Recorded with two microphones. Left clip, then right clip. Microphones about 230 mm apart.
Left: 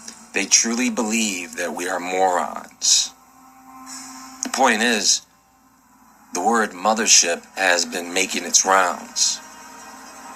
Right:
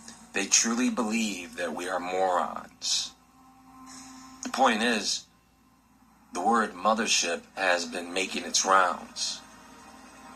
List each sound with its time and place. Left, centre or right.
0.0 s a man's voice: left
3.8 s music: left
6.3 s a man's voice: left